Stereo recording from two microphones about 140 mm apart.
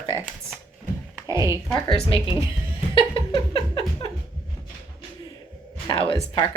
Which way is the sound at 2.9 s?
40° left (ahead or behind).